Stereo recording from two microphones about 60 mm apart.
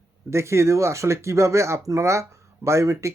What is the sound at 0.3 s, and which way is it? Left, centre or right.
Speech, right.